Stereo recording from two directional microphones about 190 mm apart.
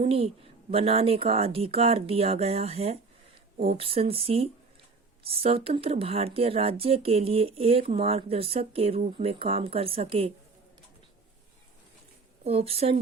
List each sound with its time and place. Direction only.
0.0 s speech: 30° right (ahead or behind)
12.5 s speech: 30° right (ahead or behind)